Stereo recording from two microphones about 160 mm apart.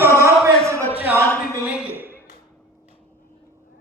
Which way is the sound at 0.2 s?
20° right (ahead or behind).